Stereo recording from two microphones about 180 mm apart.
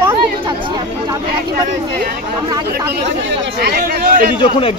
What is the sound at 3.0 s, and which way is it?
Speech, 80° right.